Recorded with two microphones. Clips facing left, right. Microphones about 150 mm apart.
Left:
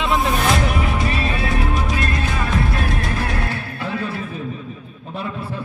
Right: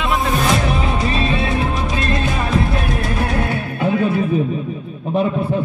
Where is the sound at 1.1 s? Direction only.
25° right (ahead or behind).